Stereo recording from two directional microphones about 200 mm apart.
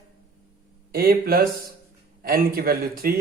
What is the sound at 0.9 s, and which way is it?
A man's voice, 50° right (ahead or behind).